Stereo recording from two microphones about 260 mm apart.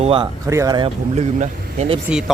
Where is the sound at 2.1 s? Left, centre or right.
Centre.